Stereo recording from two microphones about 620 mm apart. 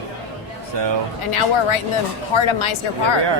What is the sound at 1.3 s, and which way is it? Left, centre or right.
Speech, left.